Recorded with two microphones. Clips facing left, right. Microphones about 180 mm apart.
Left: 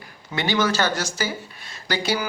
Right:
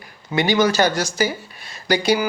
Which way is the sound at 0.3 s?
15° right (ahead or behind).